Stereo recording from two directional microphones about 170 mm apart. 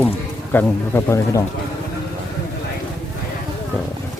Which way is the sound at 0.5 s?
15° left (ahead or behind).